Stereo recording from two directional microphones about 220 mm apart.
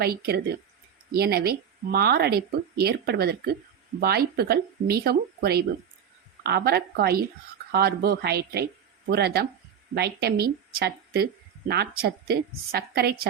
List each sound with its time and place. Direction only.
0.0 s speech: 45° right (ahead or behind)